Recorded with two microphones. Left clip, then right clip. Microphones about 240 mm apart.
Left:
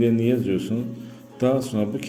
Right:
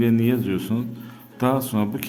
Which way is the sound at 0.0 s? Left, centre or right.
Right.